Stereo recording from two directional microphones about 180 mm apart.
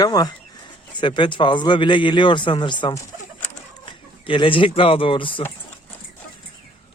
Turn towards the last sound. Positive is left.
turn(degrees=30)  # may be behind; listen again after turning